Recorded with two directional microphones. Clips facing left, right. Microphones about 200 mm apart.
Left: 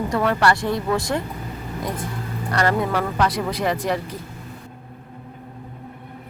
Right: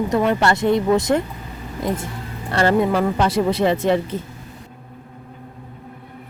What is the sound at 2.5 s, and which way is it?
Speech, 25° right (ahead or behind).